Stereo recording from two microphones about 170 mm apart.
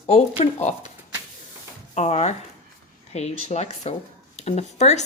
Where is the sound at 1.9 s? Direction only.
40° left (ahead or behind).